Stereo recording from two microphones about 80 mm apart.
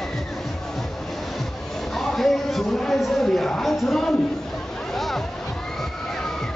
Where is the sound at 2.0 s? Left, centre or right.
Centre.